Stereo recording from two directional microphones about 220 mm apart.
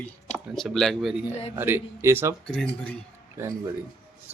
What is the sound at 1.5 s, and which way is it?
Speech, 10° right (ahead or behind).